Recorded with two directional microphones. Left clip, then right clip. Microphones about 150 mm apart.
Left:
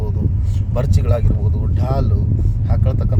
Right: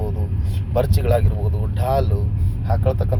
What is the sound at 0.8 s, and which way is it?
Speech, 20° left (ahead or behind).